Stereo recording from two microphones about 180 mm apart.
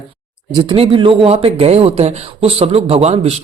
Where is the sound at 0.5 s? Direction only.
30° right (ahead or behind).